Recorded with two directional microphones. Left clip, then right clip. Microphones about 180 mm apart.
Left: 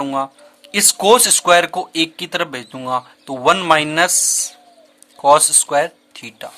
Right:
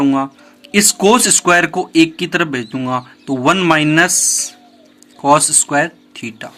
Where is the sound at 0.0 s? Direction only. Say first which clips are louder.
Right 5 dB; 40° left (ahead or behind).